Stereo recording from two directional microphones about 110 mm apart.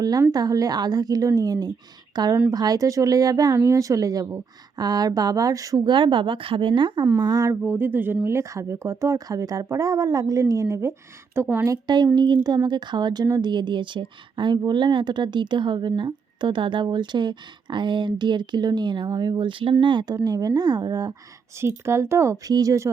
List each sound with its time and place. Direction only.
0.0 s a woman's voice: 35° right (ahead or behind)
5.9 s speech: 50° right (ahead or behind)
7.2 s a woman's voice: 35° right (ahead or behind)
7.5 s speech: 20° right (ahead or behind)
11.7 s a woman's voice: 35° right (ahead or behind)
20.2 s a woman's voice: 35° right (ahead or behind)